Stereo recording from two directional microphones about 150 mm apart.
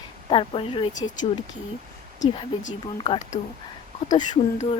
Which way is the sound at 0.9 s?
55° left (ahead or behind).